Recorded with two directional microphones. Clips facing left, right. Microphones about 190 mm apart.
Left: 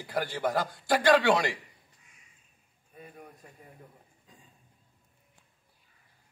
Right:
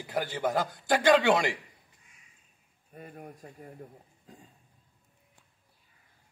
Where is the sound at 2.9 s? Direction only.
50° right (ahead or behind).